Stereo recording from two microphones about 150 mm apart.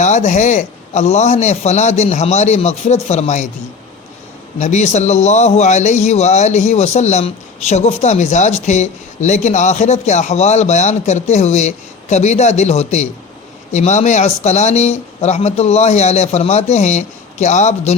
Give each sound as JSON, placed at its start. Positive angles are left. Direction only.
{"t": 0.0, "sound": "a man's voice", "side_deg": 55}
{"t": 4.6, "sound": "a man's voice", "side_deg": 50}